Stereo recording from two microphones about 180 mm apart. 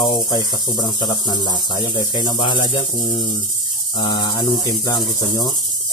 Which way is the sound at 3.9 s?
25° left (ahead or behind).